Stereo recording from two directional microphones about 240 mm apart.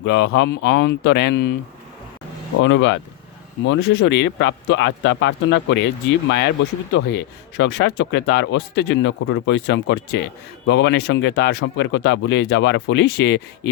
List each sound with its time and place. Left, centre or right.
0.0 s speech: left
2.6 s speech: left